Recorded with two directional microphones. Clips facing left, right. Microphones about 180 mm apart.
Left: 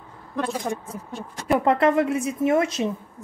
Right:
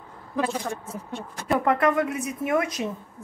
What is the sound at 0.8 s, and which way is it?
Speech, centre (ahead or behind).